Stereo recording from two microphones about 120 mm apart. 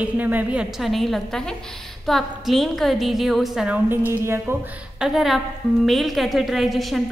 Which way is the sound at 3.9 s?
20° right (ahead or behind).